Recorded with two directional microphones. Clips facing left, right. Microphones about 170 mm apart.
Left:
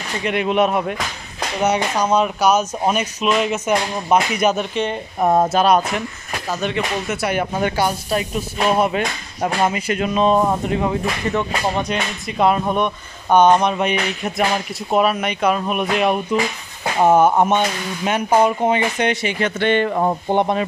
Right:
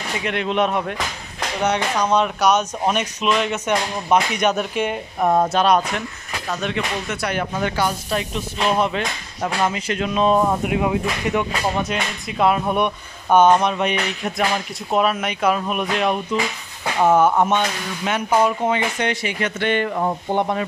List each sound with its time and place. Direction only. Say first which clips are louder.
0.2 s speech: left 4 dB; 5° left (ahead or behind)
5.2 s speech: left 2 dB; 20° left (ahead or behind)
5.5 s speech: left 2 dB; 5° left (ahead or behind)
17.0 s speech: left 2 dB; 25° left (ahead or behind)
19.9 s speech: left 3 dB; 45° left (ahead or behind)
20.2 s speech: left 3 dB; 25° left (ahead or behind)